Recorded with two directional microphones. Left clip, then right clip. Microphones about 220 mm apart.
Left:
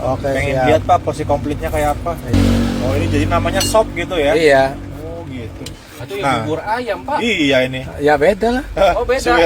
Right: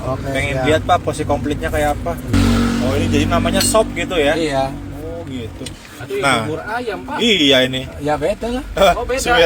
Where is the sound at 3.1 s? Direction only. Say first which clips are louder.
Even; 10° right (ahead or behind).